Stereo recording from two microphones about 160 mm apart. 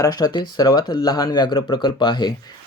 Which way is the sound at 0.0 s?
25° left (ahead or behind).